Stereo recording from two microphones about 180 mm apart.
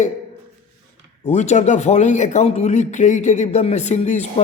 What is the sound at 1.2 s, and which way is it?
A man's voice, 40° left (ahead or behind).